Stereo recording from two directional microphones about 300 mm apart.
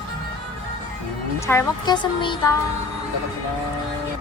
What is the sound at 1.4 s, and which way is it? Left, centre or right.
Speech, centre.